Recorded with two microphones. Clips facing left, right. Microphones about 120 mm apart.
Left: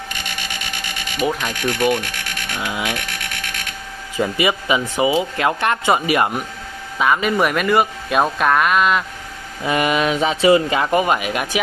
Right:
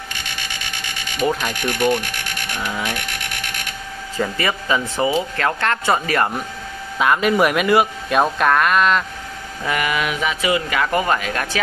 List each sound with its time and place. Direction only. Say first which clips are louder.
1.2 s speech: right 1 dB; 5° left (ahead or behind)
2.5 s speech: left 1 dB; 15° left (ahead or behind)
4.2 s speech: left 3 dB; 15° left (ahead or behind)
7.0 s speech: right 1 dB; centre (ahead or behind)
9.7 s speech: left 4 dB; 25° left (ahead or behind)